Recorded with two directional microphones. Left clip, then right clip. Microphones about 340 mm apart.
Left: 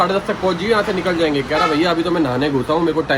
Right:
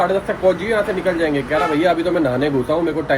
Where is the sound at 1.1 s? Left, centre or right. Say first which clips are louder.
Left 1 dB; centre.